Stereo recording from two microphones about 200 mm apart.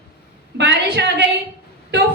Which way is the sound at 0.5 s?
60° right (ahead or behind).